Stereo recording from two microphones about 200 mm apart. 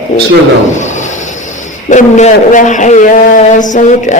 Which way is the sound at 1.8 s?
35° left (ahead or behind).